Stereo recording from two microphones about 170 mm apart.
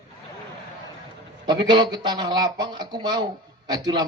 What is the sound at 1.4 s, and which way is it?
A man's voice, 25° right (ahead or behind).